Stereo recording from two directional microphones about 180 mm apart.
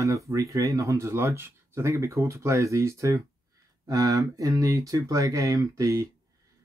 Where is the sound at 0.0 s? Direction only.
15° right (ahead or behind).